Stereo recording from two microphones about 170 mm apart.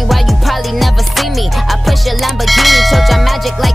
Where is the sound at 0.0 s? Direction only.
Centre (ahead or behind).